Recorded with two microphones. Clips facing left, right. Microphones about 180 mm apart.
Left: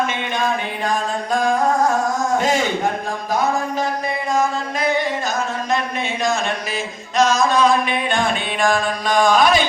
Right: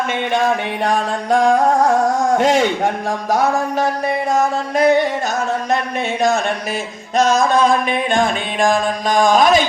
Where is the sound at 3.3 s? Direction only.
75° right (ahead or behind).